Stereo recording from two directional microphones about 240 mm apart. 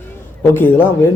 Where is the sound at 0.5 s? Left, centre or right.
Centre.